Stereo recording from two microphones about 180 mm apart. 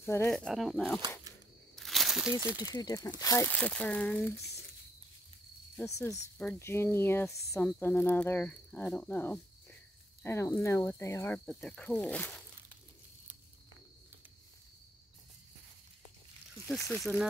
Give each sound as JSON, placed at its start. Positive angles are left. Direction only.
{"t": 0.0, "sound": "speech", "side_deg": 15}
{"t": 0.3, "sound": "speech", "side_deg": 0}
{"t": 1.8, "sound": "a sound", "side_deg": 0}
{"t": 2.4, "sound": "speech", "side_deg": -10}
{"t": 2.7, "sound": "speech", "side_deg": 20}
{"t": 5.9, "sound": "speech", "side_deg": 15}
{"t": 16.9, "sound": "speech", "side_deg": 0}